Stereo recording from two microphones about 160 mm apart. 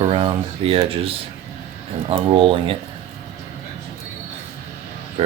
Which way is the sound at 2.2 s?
30° right (ahead or behind).